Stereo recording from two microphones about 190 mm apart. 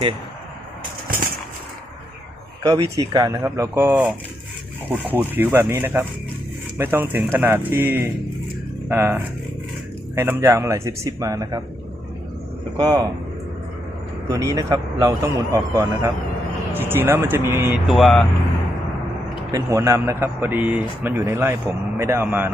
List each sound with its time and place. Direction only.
2.6 s a man's voice: 20° right (ahead or behind)
12.7 s speech: 20° right (ahead or behind)
14.3 s a man's voice: 15° right (ahead or behind)
17.8 s speech: centre (ahead or behind)
19.5 s a man's voice: 15° right (ahead or behind)